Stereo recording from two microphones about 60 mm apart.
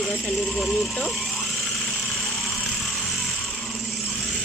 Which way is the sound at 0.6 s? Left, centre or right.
Centre.